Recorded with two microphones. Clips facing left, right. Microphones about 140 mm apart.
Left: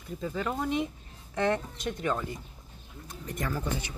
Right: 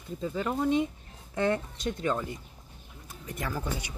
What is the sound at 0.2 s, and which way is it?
Speech, 25° right (ahead or behind).